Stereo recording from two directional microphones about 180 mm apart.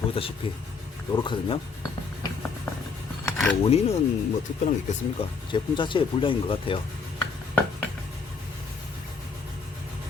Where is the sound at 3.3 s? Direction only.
Centre (ahead or behind).